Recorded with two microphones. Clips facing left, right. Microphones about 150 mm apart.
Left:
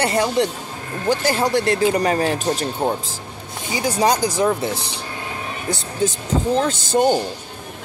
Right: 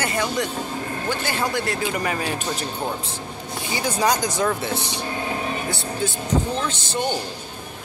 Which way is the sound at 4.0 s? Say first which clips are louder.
Left 4 dB; 30° left (ahead or behind).